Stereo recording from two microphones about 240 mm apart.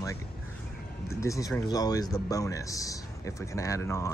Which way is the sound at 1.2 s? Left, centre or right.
Centre.